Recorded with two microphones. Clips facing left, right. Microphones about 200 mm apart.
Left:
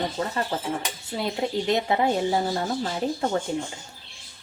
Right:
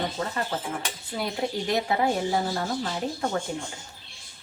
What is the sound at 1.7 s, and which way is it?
Speech, 25° left (ahead or behind).